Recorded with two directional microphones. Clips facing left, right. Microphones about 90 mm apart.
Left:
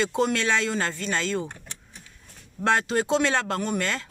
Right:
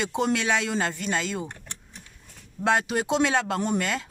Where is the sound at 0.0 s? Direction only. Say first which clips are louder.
Left 1 dB; 15° right (ahead or behind).